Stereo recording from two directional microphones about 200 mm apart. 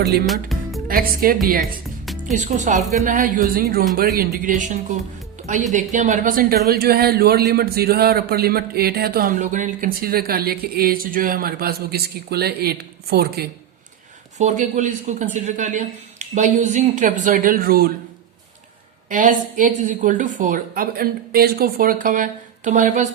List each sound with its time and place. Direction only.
0.3 s music: centre (ahead or behind)
0.9 s a man's voice: 45° right (ahead or behind)
14.3 s a woman's voice: 35° right (ahead or behind)
19.0 s a woman's voice: 40° right (ahead or behind)